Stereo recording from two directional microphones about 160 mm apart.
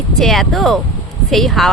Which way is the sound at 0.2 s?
Centre (ahead or behind).